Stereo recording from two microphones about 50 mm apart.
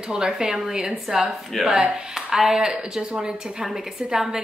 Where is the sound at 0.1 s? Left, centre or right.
Centre.